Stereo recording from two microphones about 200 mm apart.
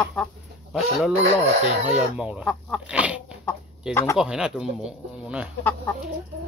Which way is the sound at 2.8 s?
5° right (ahead or behind).